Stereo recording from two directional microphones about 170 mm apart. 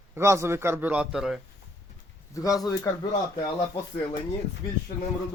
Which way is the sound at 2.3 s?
20° left (ahead or behind).